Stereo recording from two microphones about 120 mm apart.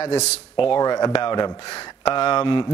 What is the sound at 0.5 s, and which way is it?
Speech, 45° left (ahead or behind).